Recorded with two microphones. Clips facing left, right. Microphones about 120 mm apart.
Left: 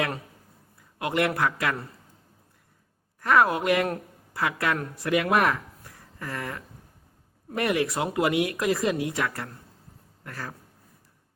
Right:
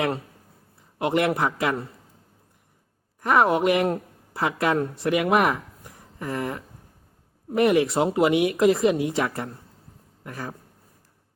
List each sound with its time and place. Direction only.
0.8 s a man's voice: 25° right (ahead or behind)
3.2 s a woman's voice: 20° right (ahead or behind)